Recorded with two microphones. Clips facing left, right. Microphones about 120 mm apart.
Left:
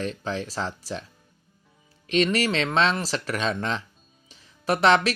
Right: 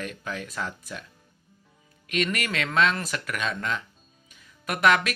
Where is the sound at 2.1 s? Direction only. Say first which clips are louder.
Left 6 dB; 30° left (ahead or behind).